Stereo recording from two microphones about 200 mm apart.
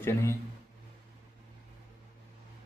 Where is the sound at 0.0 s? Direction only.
10° left (ahead or behind).